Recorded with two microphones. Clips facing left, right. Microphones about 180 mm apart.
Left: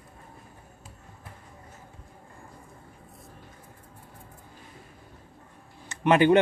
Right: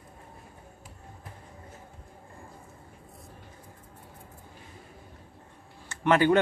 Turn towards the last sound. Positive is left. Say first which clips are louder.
# left 2 dB
turn(degrees=20)  # may be behind; listen again after turning